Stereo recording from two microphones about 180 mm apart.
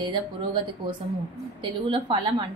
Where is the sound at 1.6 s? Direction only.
30° right (ahead or behind).